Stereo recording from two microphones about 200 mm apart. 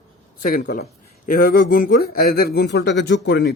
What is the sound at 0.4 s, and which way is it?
Speech, 45° left (ahead or behind).